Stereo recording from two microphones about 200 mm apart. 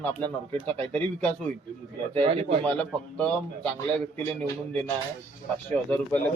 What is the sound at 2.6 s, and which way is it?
Speech, 5° left (ahead or behind).